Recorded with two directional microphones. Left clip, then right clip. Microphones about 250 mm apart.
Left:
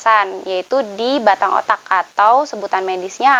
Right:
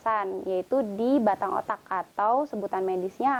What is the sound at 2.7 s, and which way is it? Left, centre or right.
Speech, centre.